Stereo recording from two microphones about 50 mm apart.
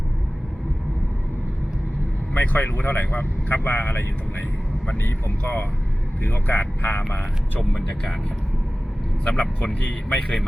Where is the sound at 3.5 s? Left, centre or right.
Left.